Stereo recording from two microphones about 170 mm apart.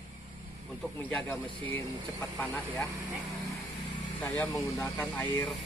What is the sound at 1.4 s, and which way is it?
Speech, 30° right (ahead or behind).